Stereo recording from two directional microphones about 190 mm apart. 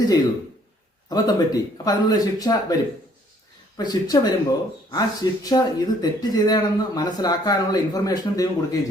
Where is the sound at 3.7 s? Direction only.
20° left (ahead or behind).